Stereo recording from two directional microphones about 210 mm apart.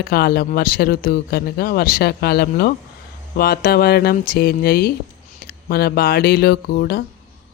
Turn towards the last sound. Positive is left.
turn(degrees=45)  # may be behind; listen again after turning